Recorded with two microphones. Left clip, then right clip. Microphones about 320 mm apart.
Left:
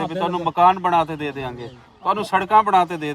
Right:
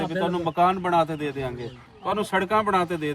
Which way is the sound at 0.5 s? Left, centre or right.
Centre.